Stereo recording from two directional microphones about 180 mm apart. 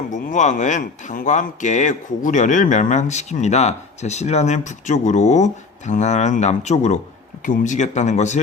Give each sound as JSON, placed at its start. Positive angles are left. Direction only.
{"t": 0.1, "sound": "speech", "side_deg": 40}